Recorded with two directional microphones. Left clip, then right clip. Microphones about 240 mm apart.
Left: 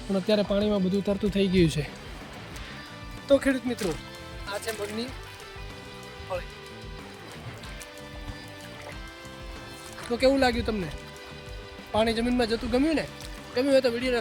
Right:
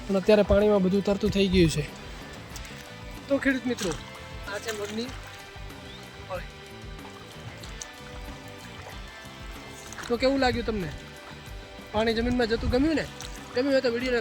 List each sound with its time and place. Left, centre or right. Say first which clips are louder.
0.1 s speech: right 4 dB; centre
3.2 s speech: left 3 dB; centre
10.1 s speech: left 2 dB; centre
11.9 s speech: left 1 dB; centre